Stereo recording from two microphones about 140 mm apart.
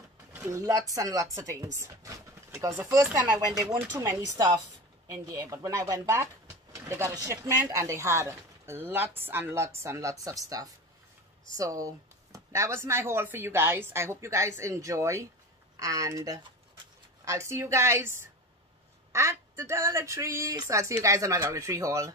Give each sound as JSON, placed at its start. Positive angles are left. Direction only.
{"t": 0.3, "sound": "speech", "side_deg": -15}
{"t": 5.0, "sound": "speech", "side_deg": -25}